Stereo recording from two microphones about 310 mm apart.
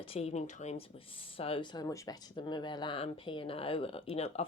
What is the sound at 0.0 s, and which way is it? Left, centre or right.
A woman's voice, centre.